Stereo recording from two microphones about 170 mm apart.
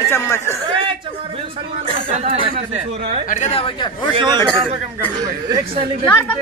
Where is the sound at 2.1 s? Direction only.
40° right (ahead or behind).